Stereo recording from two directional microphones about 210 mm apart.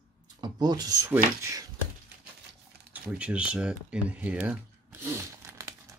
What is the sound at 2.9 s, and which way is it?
Speech, 5° right (ahead or behind).